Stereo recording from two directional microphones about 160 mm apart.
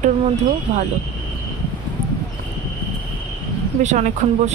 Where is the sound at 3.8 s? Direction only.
45° right (ahead or behind).